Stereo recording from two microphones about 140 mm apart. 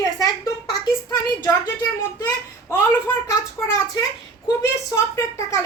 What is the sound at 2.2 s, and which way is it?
Speech, 25° left (ahead or behind).